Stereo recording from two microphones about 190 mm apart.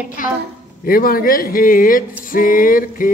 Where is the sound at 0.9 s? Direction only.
50° left (ahead or behind).